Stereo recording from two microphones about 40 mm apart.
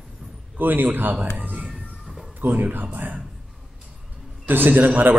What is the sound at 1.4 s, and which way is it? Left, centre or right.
Music, right.